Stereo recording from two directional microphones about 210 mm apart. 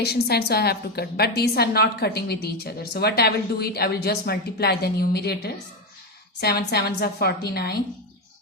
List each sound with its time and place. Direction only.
0.0 s a woman's voice: 50° left (ahead or behind)